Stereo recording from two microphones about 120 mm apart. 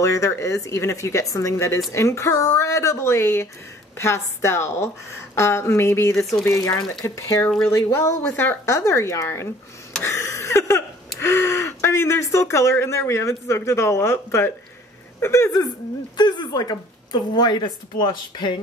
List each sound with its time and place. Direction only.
0.0 s speech: 25° left (ahead or behind)
6.1 s speech: centre (ahead or behind)
6.4 s speech: 25° left (ahead or behind)
10.0 s a sound: 25° left (ahead or behind)
11.1 s speech: 25° left (ahead or behind)
16.2 s speech: 35° left (ahead or behind)